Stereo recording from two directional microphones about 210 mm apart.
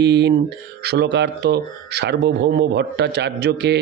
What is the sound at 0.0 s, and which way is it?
A man's voice, 55° right (ahead or behind).